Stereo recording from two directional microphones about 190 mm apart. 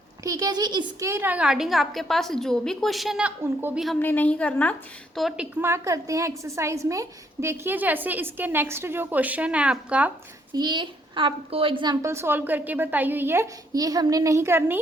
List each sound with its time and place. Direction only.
0.2 s a woman's voice: 20° right (ahead or behind)
4.0 s a woman's voice: 10° left (ahead or behind)
5.1 s a woman's voice: 5° right (ahead or behind)
10.5 s a woman's voice: 25° right (ahead or behind)